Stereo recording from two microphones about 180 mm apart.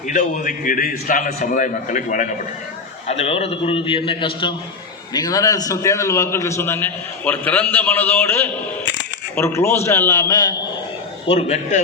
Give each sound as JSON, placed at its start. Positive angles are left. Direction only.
{"t": 0.1, "sound": "a man's voice", "side_deg": 45}
{"t": 3.1, "sound": "a man's voice", "side_deg": 35}
{"t": 11.3, "sound": "a man's voice", "side_deg": 35}